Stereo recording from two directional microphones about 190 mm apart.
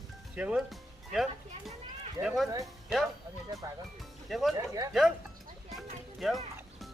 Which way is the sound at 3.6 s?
20° right (ahead or behind).